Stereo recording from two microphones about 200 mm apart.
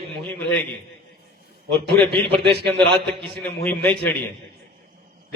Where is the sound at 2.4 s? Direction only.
55° right (ahead or behind).